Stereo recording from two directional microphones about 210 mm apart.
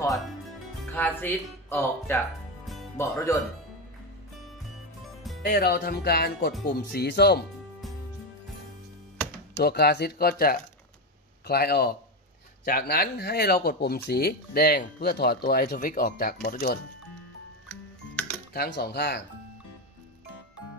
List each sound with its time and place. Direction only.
0.9 s speech: 10° left (ahead or behind)
2.6 s music: centre (ahead or behind)
3.0 s speech: 15° left (ahead or behind)
5.4 s speech: 50° left (ahead or behind)
9.6 s speech: 50° left (ahead or behind)
18.5 s speech: 50° left (ahead or behind)